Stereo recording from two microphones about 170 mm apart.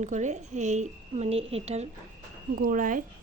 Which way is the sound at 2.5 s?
55° right (ahead or behind).